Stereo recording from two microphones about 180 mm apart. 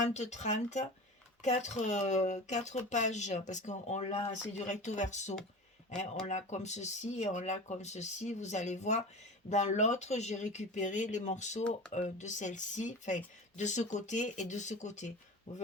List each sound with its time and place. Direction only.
0.0 s speech: 40° left (ahead or behind)